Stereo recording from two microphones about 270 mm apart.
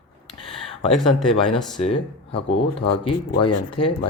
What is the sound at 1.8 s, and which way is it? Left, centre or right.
Speech, left.